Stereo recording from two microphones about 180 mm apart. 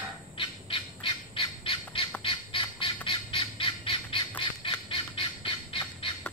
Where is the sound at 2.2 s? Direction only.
30° left (ahead or behind).